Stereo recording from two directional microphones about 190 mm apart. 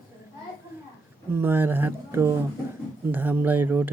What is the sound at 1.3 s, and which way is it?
Speech, 10° right (ahead or behind).